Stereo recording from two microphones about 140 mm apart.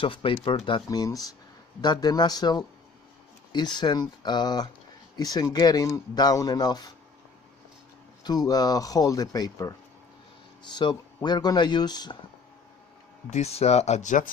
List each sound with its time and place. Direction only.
0.0 s speech: 40° left (ahead or behind)
0.9 s speech: 25° left (ahead or behind)
8.2 s speech: 30° left (ahead or behind)
13.3 s speech: 50° left (ahead or behind)